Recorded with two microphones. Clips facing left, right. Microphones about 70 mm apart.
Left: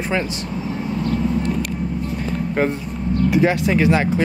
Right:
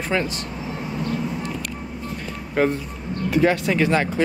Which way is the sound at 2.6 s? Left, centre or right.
Centre.